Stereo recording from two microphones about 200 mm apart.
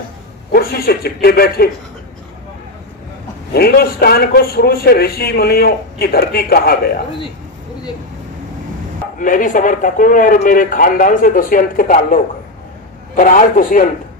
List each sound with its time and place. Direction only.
0.5 s a man's voice: 50° left (ahead or behind)
3.5 s a man's voice: 50° left (ahead or behind)
9.2 s a man's voice: 40° left (ahead or behind)